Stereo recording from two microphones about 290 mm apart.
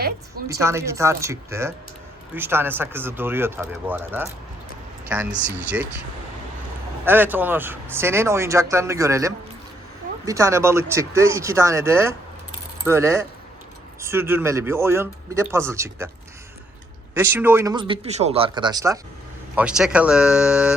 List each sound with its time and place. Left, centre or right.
0.6 s speech: centre
7.0 s speech: centre
17.2 s speech: centre